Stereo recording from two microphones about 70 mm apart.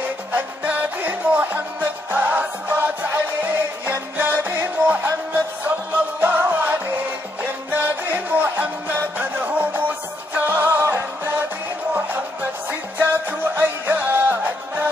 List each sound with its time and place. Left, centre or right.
0.3 s music: right